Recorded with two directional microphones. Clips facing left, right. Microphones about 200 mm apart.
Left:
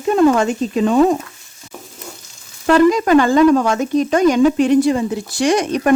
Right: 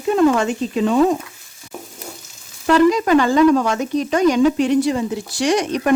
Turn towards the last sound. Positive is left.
turn(degrees=50)  # may be behind; listen again after turning